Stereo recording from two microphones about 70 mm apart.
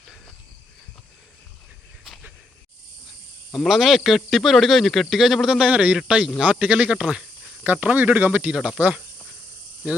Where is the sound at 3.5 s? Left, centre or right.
Centre.